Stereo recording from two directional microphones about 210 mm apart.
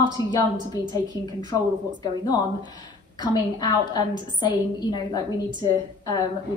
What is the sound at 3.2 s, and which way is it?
A woman's voice, 20° left (ahead or behind).